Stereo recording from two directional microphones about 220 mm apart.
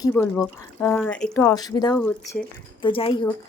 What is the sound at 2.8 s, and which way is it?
Speech, 25° left (ahead or behind).